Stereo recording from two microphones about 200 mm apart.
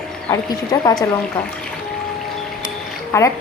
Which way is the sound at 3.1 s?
15° left (ahead or behind).